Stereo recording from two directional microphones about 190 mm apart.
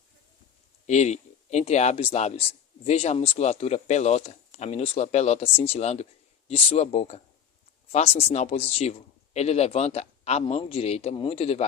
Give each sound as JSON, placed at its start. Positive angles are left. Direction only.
{"t": 0.9, "sound": "speech", "side_deg": 35}